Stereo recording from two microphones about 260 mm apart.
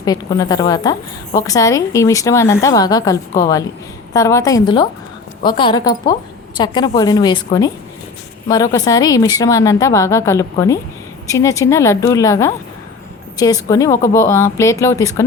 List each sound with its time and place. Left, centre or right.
0.0 s a woman's voice: centre